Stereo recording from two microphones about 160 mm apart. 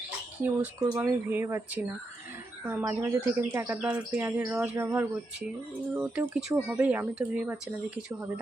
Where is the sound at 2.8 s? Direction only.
15° right (ahead or behind).